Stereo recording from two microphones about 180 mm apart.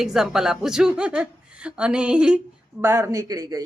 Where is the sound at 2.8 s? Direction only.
20° right (ahead or behind).